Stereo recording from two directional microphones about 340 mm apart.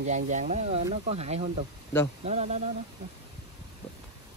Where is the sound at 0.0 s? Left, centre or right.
Right.